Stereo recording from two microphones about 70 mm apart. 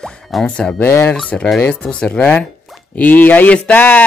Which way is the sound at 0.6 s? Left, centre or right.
Centre.